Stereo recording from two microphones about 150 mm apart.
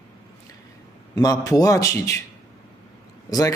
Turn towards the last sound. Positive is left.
turn(degrees=25)  # may be behind; listen again after turning